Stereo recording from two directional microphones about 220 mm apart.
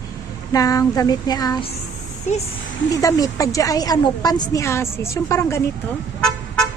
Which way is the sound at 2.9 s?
15° left (ahead or behind).